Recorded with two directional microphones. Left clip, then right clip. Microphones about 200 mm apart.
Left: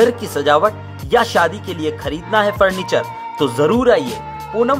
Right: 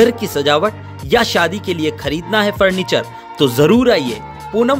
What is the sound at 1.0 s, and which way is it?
Speech, 40° right (ahead or behind).